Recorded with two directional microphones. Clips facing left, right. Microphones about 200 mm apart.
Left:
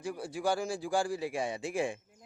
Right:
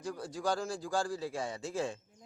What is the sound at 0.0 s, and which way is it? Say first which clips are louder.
A man's voice: left 2 dB; 10° left (ahead or behind).